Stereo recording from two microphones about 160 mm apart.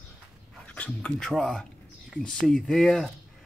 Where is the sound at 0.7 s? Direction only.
10° left (ahead or behind).